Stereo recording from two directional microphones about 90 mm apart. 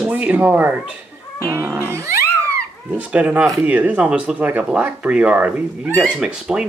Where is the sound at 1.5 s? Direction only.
30° right (ahead or behind).